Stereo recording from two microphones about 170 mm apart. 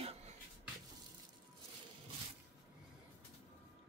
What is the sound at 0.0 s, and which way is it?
Music, 35° right (ahead or behind).